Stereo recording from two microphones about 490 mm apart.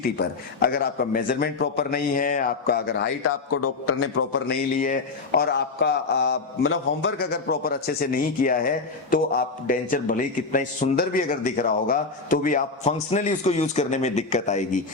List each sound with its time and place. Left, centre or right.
0.2 s a man's voice: centre